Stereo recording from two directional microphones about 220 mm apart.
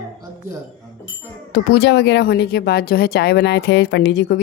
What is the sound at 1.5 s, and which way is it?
Speech, 50° left (ahead or behind).